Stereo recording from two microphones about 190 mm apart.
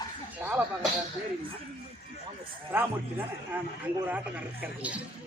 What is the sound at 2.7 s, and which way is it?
Speech, 10° right (ahead or behind).